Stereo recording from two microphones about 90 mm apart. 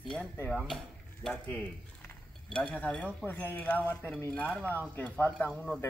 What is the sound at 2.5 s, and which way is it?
Speech, 10° left (ahead or behind).